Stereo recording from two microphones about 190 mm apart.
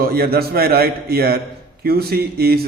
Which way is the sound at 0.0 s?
50° right (ahead or behind).